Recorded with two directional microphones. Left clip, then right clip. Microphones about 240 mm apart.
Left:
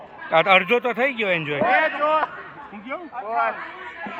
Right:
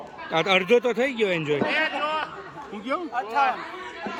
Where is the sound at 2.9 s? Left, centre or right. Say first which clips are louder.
Right 4 dB; centre.